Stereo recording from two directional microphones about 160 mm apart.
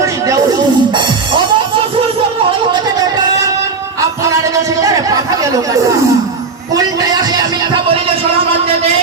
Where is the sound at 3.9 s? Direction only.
20° right (ahead or behind).